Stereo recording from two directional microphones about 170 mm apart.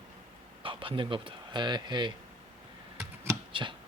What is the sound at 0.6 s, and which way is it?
Speech, 30° right (ahead or behind).